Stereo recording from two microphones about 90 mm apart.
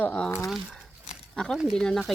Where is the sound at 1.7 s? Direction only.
5° left (ahead or behind).